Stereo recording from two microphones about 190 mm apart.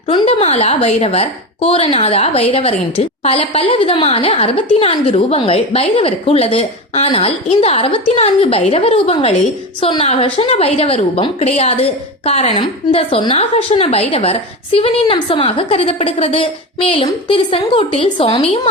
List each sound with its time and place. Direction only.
0.1 s a woman's voice: 30° left (ahead or behind)